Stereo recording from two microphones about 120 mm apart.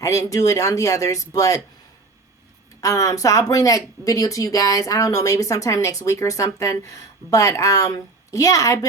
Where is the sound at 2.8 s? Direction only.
25° left (ahead or behind).